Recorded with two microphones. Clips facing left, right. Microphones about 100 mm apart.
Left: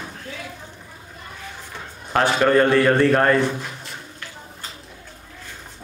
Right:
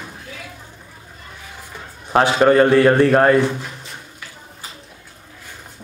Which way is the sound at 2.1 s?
25° right (ahead or behind).